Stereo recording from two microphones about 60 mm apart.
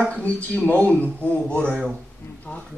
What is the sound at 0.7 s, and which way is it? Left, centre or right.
Speech, left.